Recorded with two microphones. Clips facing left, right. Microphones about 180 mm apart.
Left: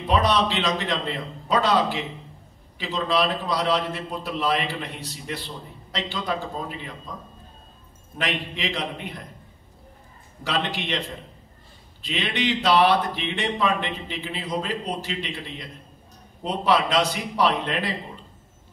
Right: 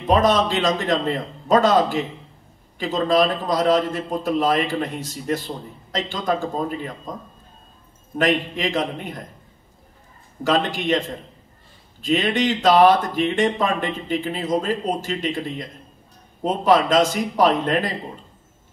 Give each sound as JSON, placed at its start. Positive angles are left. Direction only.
{"t": 0.0, "sound": "a man's voice", "side_deg": -45}
{"t": 8.2, "sound": "a man's voice", "side_deg": -45}
{"t": 10.4, "sound": "a man's voice", "side_deg": -45}